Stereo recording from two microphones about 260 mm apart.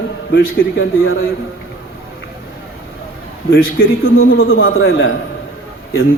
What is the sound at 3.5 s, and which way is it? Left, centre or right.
A man's voice, left.